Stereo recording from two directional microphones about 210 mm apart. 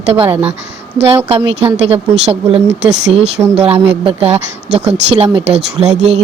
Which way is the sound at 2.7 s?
55° right (ahead or behind).